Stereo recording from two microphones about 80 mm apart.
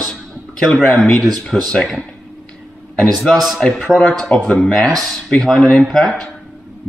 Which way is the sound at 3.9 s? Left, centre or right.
Centre.